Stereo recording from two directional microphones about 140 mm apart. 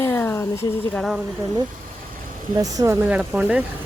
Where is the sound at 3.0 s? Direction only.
10° right (ahead or behind).